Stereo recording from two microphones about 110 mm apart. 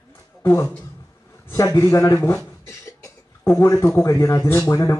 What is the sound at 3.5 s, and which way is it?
Speech, 25° left (ahead or behind).